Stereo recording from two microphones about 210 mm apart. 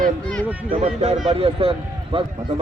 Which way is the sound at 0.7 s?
30° right (ahead or behind).